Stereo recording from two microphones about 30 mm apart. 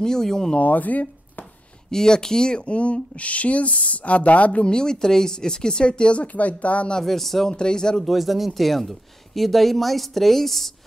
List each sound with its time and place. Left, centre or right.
0.0 s speech: centre
0.6 s speech: left
1.9 s speech: left
2.6 s speech: left
4.6 s speech: left
6.2 s speech: left
7.1 s speech: centre
7.5 s speech: left
8.1 s speech: centre